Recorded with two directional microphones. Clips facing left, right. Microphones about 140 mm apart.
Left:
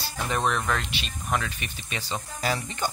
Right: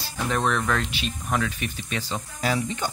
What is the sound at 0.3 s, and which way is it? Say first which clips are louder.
Speech: right 2 dB; 5° left (ahead or behind).